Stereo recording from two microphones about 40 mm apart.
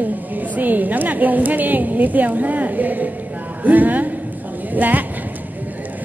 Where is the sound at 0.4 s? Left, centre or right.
Right.